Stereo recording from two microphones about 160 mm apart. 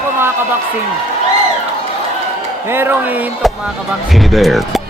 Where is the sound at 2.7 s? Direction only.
15° right (ahead or behind).